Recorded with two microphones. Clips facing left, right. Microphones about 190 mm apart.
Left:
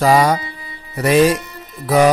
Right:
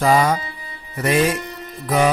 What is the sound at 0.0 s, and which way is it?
Speech, 35° left (ahead or behind).